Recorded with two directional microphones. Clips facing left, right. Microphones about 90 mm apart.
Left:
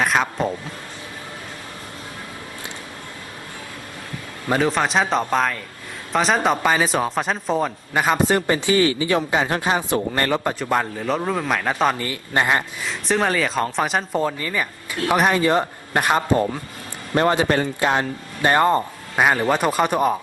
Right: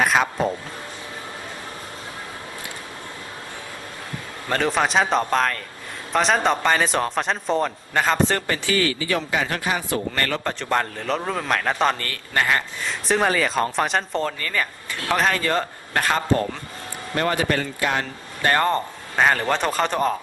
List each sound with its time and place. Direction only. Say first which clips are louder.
0.0 s speech: even; centre (ahead or behind)
4.4 s a man's voice: left 2 dB; 5° left (ahead or behind)
8.4 s speech: left 4 dB; 20° left (ahead or behind)
12.8 s speech: even; centre (ahead or behind); by 16.5 s 15° left (ahead or behind)
17.2 s speech: left 4 dB; 25° left (ahead or behind); by 20.1 s 10° left (ahead or behind)